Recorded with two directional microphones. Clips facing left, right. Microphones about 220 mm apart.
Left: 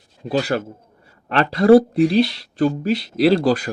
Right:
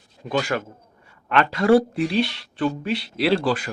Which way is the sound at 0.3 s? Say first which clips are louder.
Left 3 dB; 35° left (ahead or behind).